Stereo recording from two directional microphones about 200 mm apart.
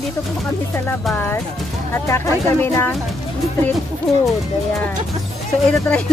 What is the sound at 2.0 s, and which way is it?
Speech, 15° left (ahead or behind).